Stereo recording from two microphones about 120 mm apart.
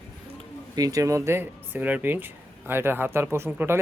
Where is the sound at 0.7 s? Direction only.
30° right (ahead or behind).